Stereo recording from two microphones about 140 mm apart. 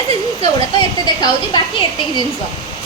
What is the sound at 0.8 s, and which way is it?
Speech, 30° left (ahead or behind).